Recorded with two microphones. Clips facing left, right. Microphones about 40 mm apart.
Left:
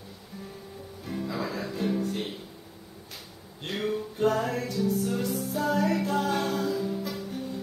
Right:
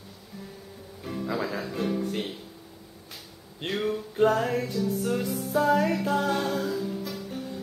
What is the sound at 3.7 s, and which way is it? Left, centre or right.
Music, centre.